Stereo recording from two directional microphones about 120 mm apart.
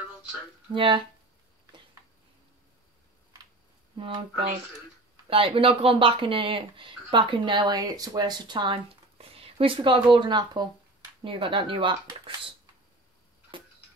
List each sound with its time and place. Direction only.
0.7 s speech: 45° right (ahead or behind)
3.9 s speech: 45° right (ahead or behind)
9.2 s a sound: 55° right (ahead or behind)
10.1 s speech: 40° right (ahead or behind)
13.5 s tick-tock: 40° right (ahead or behind)